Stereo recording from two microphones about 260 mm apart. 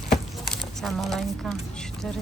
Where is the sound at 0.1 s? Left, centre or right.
Centre.